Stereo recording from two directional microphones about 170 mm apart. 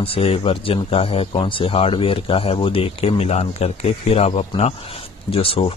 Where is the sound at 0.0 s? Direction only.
35° left (ahead or behind).